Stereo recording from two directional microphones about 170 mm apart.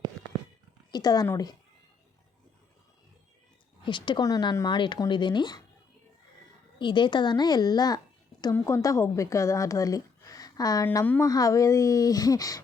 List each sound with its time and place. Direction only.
0.2 s a sound: 5° left (ahead or behind)
0.9 s a woman's voice: 25° left (ahead or behind)
3.8 s a woman's voice: 30° left (ahead or behind)
6.7 s a woman's voice: 25° left (ahead or behind)
10.8 s a woman's voice: 10° left (ahead or behind)